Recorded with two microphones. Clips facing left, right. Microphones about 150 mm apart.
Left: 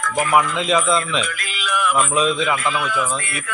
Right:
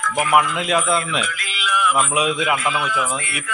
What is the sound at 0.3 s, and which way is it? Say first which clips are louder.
Speech: left 1 dB; 5° right (ahead or behind).